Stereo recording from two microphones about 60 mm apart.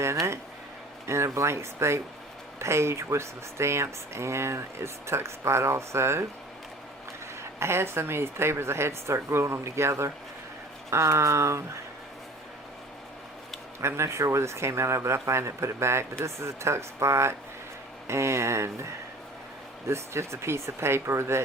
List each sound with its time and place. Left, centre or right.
0.0 s a sound: right
1.0 s speech: right
7.6 s speech: right
13.8 s speech: right
19.9 s speech: right